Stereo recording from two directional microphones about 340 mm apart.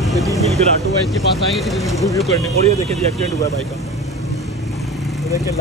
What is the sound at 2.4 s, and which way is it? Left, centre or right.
Speech, centre.